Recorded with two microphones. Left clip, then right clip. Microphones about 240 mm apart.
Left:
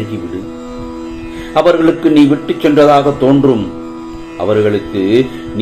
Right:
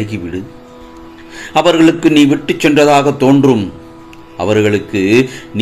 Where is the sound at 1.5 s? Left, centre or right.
Right.